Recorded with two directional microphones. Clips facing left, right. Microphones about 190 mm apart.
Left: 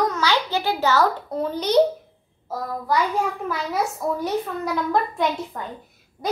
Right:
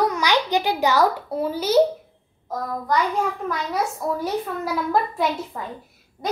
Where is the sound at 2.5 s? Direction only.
5° left (ahead or behind).